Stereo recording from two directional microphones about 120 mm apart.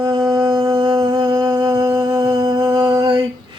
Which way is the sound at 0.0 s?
30° right (ahead or behind).